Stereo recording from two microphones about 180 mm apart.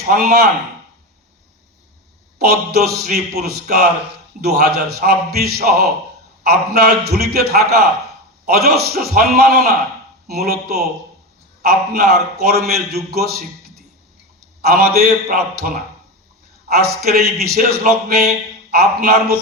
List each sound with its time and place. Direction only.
0.0 s a man's voice: 60° right (ahead or behind)
2.4 s a man's voice: 60° right (ahead or behind)
14.6 s a man's voice: 60° right (ahead or behind)